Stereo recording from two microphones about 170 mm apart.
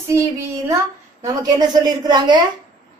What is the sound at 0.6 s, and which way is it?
A woman's voice, 20° right (ahead or behind).